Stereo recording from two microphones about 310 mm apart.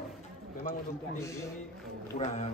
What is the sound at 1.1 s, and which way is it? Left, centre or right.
Speech, centre.